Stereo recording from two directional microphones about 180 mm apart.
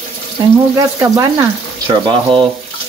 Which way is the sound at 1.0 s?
20° right (ahead or behind).